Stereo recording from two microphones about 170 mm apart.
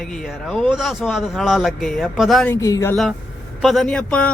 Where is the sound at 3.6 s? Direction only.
Centre (ahead or behind).